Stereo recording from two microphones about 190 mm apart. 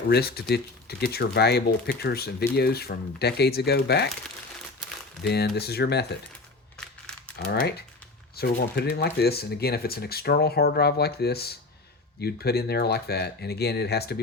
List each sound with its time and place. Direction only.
0.1 s speech: 55° left (ahead or behind)
5.2 s speech: 60° left (ahead or behind)
6.7 s crumpling: 5° left (ahead or behind)
7.3 s speech: 60° left (ahead or behind)